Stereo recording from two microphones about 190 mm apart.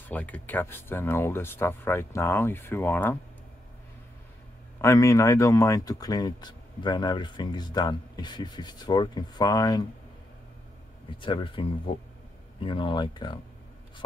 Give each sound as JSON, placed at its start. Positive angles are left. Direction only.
{"t": 0.1, "sound": "speech", "side_deg": 10}
{"t": 4.8, "sound": "speech", "side_deg": 15}
{"t": 11.1, "sound": "speech", "side_deg": 25}